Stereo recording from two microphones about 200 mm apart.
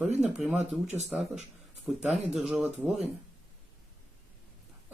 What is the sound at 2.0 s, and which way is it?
Speech, centre (ahead or behind).